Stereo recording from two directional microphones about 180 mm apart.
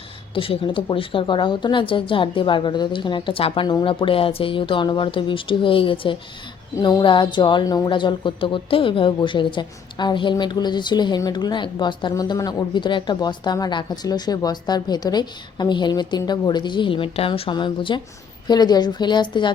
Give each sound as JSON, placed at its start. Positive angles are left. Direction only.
{"t": 0.3, "sound": "speech", "side_deg": 30}